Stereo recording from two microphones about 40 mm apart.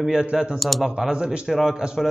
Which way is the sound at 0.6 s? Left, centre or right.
Centre.